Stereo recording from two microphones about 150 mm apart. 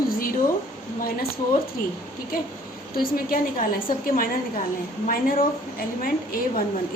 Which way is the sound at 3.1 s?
70° left (ahead or behind).